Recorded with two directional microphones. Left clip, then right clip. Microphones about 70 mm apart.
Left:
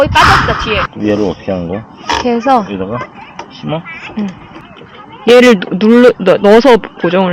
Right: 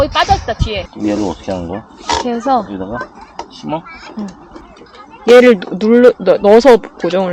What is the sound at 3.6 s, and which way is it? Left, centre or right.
Speech, centre.